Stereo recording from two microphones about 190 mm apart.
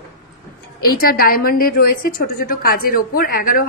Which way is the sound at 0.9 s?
50° left (ahead or behind).